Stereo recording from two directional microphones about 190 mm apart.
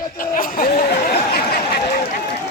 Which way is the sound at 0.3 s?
50° left (ahead or behind).